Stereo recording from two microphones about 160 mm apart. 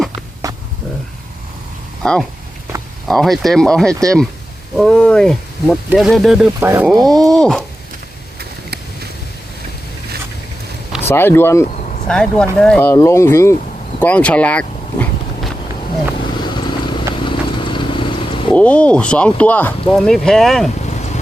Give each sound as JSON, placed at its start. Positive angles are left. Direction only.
{"t": 0.4, "sound": "a sound", "side_deg": -20}
{"t": 2.0, "sound": "speech", "side_deg": 5}
{"t": 6.6, "sound": "speech", "side_deg": -15}
{"t": 7.1, "sound": "speech", "side_deg": 0}
{"t": 11.1, "sound": "speech", "side_deg": 15}
{"t": 12.9, "sound": "speech", "side_deg": 20}
{"t": 16.4, "sound": "vehicle", "side_deg": 30}
{"t": 18.5, "sound": "speech", "side_deg": 10}
{"t": 20.8, "sound": "a sound", "side_deg": 45}